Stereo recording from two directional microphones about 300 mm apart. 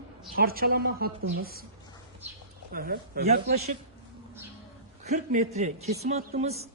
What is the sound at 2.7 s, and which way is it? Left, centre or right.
A woman's voice, right.